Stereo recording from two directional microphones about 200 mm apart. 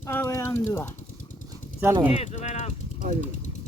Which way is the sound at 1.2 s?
40° left (ahead or behind).